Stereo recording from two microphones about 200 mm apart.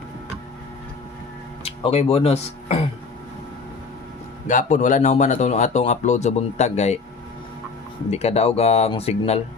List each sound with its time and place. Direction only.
1.6 s speech: 30° left (ahead or behind)
4.4 s speech: 40° left (ahead or behind)
8.1 s speech: 30° left (ahead or behind)